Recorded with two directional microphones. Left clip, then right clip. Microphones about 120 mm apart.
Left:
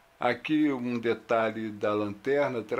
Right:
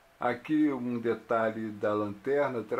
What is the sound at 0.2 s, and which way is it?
Speech, 40° left (ahead or behind).